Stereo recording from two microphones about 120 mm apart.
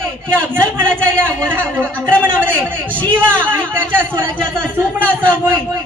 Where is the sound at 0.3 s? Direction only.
20° right (ahead or behind).